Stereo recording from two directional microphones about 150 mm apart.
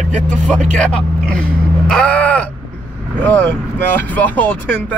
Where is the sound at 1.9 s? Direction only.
10° left (ahead or behind).